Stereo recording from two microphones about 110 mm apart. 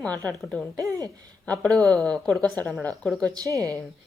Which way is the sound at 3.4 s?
30° right (ahead or behind).